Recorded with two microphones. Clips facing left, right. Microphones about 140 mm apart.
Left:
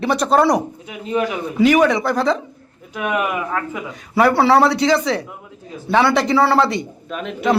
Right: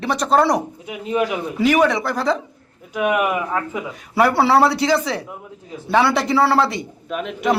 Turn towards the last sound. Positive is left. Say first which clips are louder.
# left 1 dB
turn(degrees=-5)  # may be behind; listen again after turning